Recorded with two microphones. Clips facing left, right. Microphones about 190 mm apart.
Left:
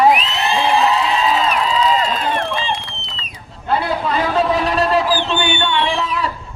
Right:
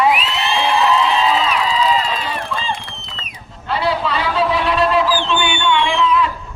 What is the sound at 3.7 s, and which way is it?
A man's voice, 50° left (ahead or behind).